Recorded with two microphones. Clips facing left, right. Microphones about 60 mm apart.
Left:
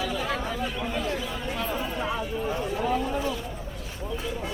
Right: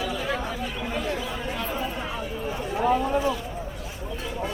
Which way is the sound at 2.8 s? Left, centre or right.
Right.